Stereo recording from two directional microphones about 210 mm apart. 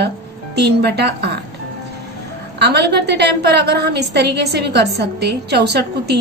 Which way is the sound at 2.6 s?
50° right (ahead or behind).